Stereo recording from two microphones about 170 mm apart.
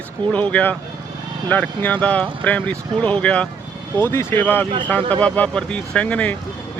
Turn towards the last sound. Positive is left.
turn(degrees=10)  # may be behind; listen again after turning